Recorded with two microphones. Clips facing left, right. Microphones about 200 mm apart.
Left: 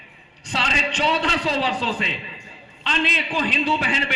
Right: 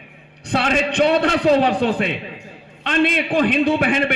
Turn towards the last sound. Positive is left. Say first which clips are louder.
# right 7 dB
turn(degrees=-55)  # may be behind; listen again after turning